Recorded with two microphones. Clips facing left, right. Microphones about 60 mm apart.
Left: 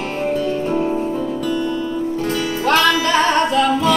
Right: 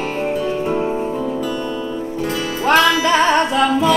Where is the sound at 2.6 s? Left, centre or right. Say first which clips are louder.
Right 2 dB; centre.